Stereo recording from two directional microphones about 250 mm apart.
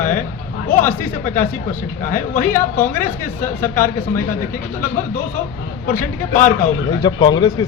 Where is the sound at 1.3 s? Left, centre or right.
Left.